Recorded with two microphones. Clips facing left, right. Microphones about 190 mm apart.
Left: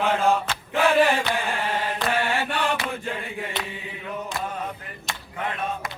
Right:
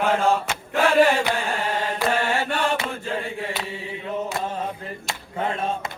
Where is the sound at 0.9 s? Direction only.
15° right (ahead or behind).